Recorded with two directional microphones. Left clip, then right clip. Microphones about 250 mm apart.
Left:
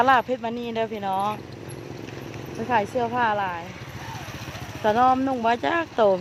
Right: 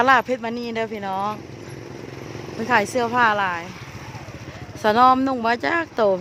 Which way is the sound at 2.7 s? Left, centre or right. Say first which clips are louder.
Right 4 dB; centre.